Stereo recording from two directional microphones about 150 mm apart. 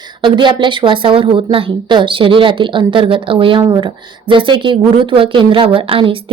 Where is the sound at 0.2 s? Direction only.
30° right (ahead or behind).